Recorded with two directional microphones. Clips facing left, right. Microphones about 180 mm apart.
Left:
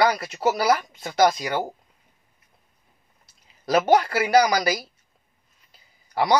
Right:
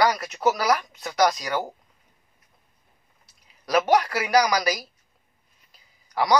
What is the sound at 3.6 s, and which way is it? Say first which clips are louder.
Speech: left 2 dB; 25° left (ahead or behind).